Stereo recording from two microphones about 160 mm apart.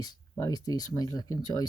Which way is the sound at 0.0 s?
25° left (ahead or behind).